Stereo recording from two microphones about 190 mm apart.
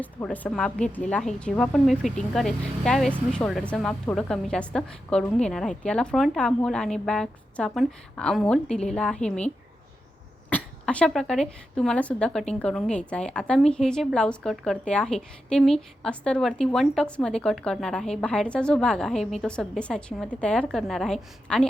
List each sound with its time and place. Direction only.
0.0 s a woman's voice: 10° left (ahead or behind)
10.5 s a woman's voice: 5° left (ahead or behind)